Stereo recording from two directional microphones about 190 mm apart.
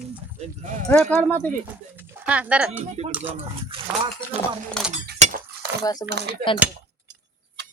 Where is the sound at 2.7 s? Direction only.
35° right (ahead or behind).